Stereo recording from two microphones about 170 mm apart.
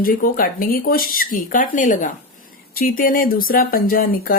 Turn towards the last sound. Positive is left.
turn(degrees=55)  # may be behind; listen again after turning